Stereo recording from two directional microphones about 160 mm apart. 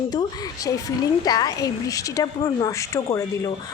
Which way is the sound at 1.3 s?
25° left (ahead or behind).